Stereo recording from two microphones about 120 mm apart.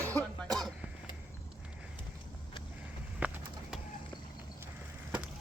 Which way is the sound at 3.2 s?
5° right (ahead or behind).